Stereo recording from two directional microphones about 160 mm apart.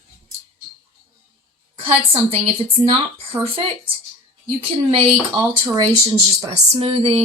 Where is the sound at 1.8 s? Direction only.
35° right (ahead or behind).